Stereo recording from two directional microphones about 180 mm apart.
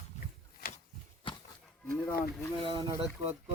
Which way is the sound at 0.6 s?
60° left (ahead or behind).